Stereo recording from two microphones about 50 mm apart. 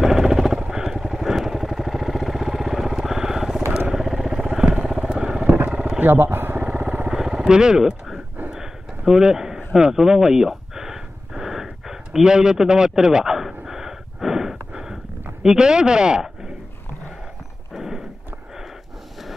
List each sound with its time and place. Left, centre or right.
0.0 s vehicle: centre
5.7 s roaring cats: centre
5.9 s a sound: right
6.6 s vehicle: right
7.2 s vehicle: centre
8.5 s a sound: centre
15.4 s speech: centre
17.7 s horse: centre